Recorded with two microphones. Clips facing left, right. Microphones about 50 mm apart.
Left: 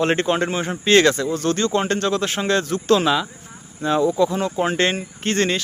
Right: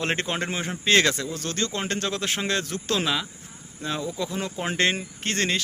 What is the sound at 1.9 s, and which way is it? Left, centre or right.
Speech, centre.